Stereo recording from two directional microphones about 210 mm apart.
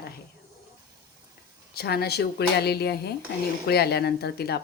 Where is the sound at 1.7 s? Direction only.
50° left (ahead or behind).